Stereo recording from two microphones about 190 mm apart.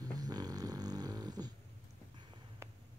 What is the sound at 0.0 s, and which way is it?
Snoring, 20° right (ahead or behind).